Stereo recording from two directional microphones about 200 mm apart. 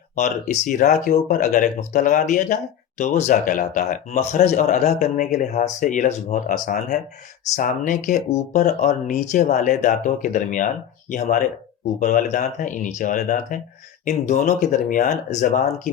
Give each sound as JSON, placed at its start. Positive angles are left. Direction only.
{"t": 0.2, "sound": "speech", "side_deg": 40}